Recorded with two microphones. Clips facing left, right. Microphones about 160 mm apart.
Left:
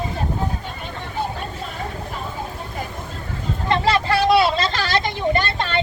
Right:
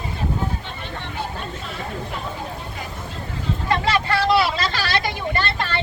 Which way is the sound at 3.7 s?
30° left (ahead or behind).